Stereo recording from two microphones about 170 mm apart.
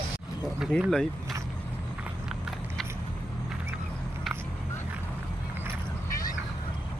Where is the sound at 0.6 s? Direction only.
Centre (ahead or behind).